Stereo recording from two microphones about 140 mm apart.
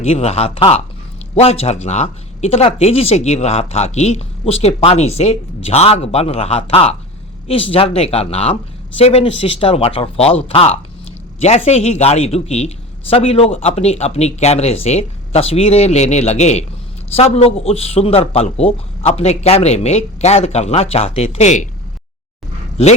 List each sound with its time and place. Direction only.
0.0 s speech: 45° left (ahead or behind)
11.3 s speech: 50° left (ahead or behind)